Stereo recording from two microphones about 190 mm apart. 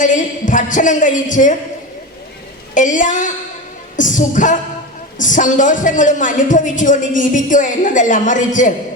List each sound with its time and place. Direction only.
0.0 s a woman's voice: 40° left (ahead or behind)
2.7 s speech: 40° left (ahead or behind)